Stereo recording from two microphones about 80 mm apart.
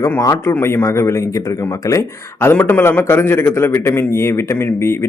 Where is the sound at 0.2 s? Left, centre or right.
Left.